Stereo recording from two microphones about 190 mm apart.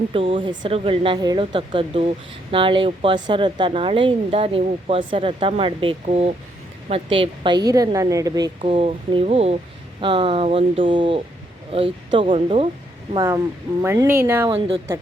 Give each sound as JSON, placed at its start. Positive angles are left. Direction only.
{"t": 0.1, "sound": "speech", "side_deg": -25}
{"t": 8.6, "sound": "speech", "side_deg": -30}
{"t": 13.1, "sound": "speech", "side_deg": -15}